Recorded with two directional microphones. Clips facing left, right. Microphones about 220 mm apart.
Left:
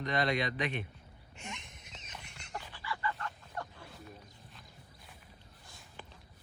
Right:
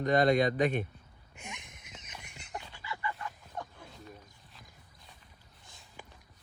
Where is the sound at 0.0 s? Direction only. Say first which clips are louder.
Right 7 dB; 45° right (ahead or behind).